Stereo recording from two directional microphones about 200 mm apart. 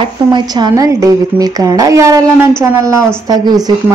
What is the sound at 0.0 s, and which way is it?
A woman's voice, 20° right (ahead or behind).